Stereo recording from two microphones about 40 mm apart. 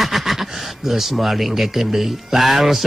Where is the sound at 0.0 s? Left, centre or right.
Centre.